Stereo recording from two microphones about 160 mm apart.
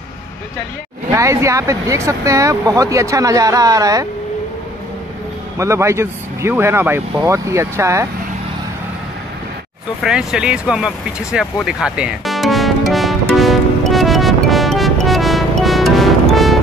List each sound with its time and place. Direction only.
1.1 s speech: 20° right (ahead or behind)
5.6 s speech: 15° right (ahead or behind)
10.0 s speech: 5° right (ahead or behind)
12.9 s music: centre (ahead or behind)